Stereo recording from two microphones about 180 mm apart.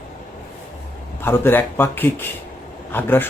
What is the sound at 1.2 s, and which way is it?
Speech, 10° left (ahead or behind).